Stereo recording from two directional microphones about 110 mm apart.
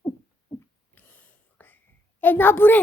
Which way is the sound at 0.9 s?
15° left (ahead or behind).